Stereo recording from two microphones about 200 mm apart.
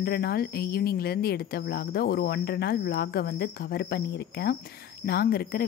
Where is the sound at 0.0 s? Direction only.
50° left (ahead or behind).